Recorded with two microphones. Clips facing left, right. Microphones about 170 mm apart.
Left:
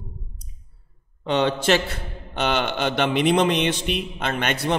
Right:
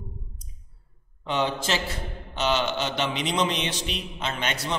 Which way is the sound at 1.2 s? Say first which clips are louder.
Left 6 dB; 65° left (ahead or behind).